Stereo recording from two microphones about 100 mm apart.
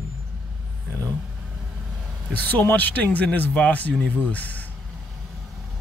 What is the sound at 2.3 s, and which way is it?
Speech, 15° left (ahead or behind).